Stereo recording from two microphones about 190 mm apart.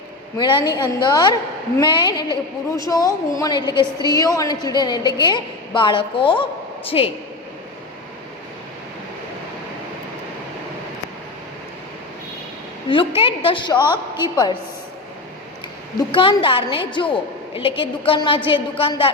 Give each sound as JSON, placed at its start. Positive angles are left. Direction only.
{"t": 0.3, "sound": "a woman's voice", "side_deg": 25}
{"t": 12.9, "sound": "a woman's voice", "side_deg": 30}
{"t": 16.0, "sound": "a woman's voice", "side_deg": 25}